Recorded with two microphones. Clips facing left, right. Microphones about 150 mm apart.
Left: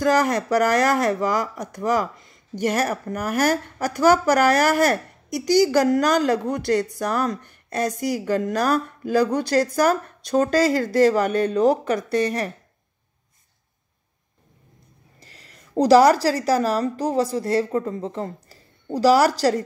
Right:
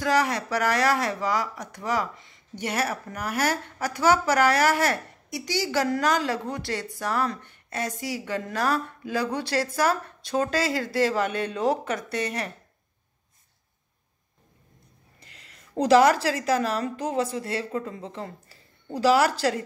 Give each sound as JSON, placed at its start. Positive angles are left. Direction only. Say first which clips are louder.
{"t": 0.0, "sound": "speech", "louder": "left 5 dB", "side_deg": 45}
{"t": 15.1, "sound": "a woman's voice", "louder": "left 4 dB", "side_deg": 35}